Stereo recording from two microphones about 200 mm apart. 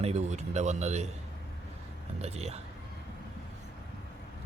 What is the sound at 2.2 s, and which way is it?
Speech, 30° right (ahead or behind).